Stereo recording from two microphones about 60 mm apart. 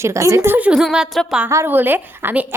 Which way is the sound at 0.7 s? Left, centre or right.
Centre.